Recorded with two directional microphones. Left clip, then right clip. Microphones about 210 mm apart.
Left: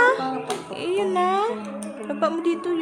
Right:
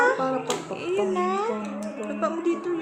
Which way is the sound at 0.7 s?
45° left (ahead or behind).